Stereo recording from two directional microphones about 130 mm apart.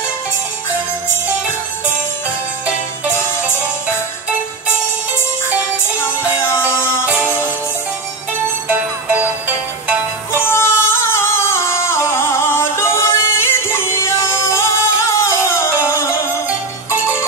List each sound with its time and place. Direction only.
6.4 s music: 20° left (ahead or behind)
8.6 s music: 15° right (ahead or behind)
10.4 s singing: 20° left (ahead or behind)